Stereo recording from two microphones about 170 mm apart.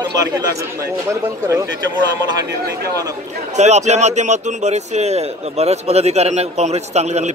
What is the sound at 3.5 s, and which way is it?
Speech, 40° right (ahead or behind).